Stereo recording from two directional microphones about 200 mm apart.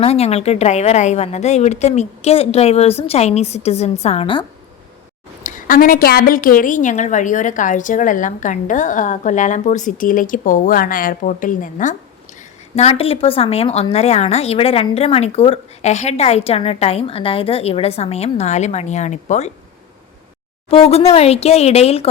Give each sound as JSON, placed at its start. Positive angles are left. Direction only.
{"t": 0.0, "sound": "a woman's voice", "side_deg": 30}
{"t": 5.4, "sound": "a woman's voice", "side_deg": 40}
{"t": 20.7, "sound": "a woman's voice", "side_deg": 30}